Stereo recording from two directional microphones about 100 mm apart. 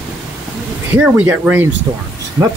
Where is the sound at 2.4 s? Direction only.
35° right (ahead or behind).